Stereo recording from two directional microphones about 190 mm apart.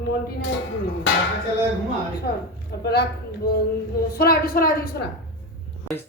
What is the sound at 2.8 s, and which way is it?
Speech, 55° left (ahead or behind).